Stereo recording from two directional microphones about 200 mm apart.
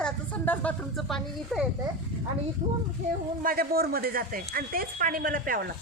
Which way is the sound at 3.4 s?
50° right (ahead or behind).